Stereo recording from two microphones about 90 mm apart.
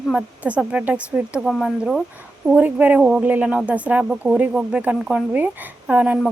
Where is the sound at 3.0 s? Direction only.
5° right (ahead or behind).